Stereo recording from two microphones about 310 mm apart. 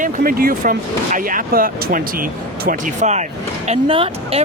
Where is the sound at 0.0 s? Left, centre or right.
Right.